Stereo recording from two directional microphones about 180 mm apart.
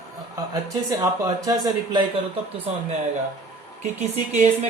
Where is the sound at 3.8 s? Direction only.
40° right (ahead or behind).